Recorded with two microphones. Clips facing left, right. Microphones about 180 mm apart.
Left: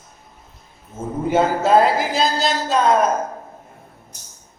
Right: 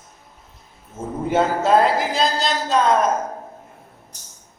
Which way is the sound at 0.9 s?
Centre (ahead or behind).